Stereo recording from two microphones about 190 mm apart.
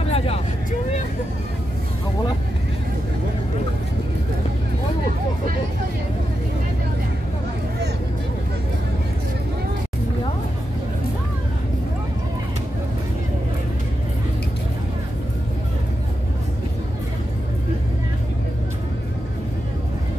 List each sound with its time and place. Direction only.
0.1 s vehicle: 35° left (ahead or behind)